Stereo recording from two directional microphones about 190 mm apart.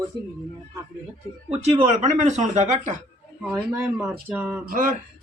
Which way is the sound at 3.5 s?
10° right (ahead or behind).